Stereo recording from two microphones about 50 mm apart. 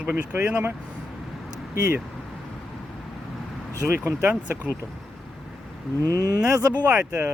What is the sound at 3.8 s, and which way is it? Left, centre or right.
Speech, right.